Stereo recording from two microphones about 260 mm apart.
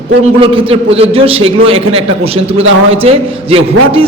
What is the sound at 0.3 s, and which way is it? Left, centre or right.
A man's voice, centre.